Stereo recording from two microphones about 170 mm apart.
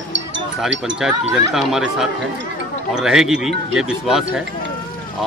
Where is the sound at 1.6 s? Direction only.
Centre (ahead or behind).